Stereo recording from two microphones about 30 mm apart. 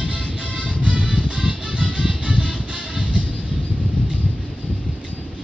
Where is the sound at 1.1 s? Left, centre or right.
Right.